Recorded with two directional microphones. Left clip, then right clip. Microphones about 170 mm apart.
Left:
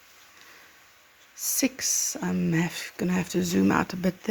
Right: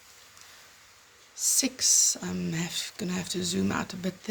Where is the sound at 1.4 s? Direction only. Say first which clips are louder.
Right 1 dB; 60° left (ahead or behind).